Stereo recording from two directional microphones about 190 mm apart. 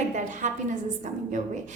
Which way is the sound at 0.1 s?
40° right (ahead or behind).